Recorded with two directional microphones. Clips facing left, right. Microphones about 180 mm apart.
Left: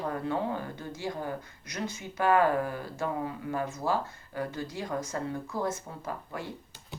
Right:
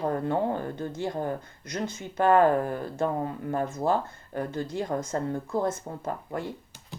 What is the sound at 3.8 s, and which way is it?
Speech, 50° right (ahead or behind).